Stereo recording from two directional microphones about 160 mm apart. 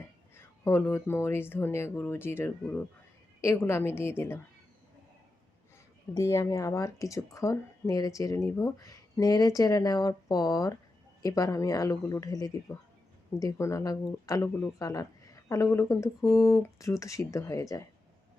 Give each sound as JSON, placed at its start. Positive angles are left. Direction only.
{"t": 0.3, "sound": "speech", "side_deg": 15}
{"t": 6.1, "sound": "speech", "side_deg": 20}